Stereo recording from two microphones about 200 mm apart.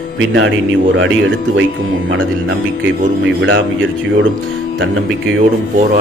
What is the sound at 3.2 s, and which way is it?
Speech, 65° right (ahead or behind).